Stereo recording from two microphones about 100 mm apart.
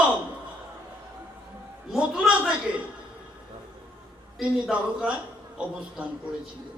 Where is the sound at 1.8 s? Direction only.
5° right (ahead or behind).